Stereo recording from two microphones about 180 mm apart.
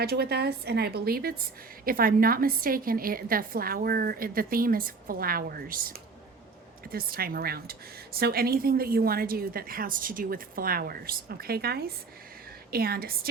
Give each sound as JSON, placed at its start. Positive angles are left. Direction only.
{"t": 0.0, "sound": "a woman's voice", "side_deg": -60}
{"t": 6.9, "sound": "a woman's voice", "side_deg": -55}